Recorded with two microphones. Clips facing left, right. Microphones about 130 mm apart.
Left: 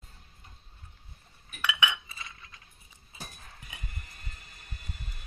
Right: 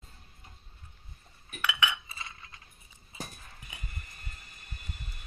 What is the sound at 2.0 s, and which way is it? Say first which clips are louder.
Chink: right 1 dB; 30° right (ahead or behind).